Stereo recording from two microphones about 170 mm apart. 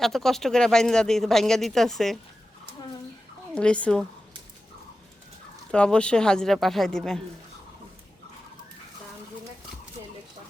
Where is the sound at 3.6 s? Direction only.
5° left (ahead or behind).